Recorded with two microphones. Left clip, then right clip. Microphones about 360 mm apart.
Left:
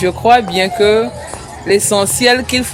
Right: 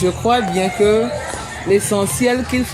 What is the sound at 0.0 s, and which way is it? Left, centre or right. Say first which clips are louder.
Speech: left 6 dB; left.